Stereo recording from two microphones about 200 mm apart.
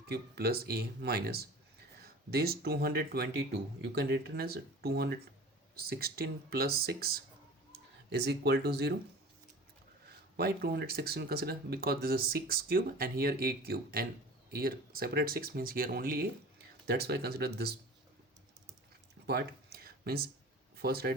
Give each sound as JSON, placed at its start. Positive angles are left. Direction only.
{"t": 0.1, "sound": "speech", "side_deg": -50}
{"t": 10.3, "sound": "speech", "side_deg": -50}
{"t": 19.3, "sound": "a sound", "side_deg": -50}
{"t": 20.7, "sound": "speech", "side_deg": -55}